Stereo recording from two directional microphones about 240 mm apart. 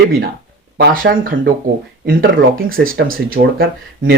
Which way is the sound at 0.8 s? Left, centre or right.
Right.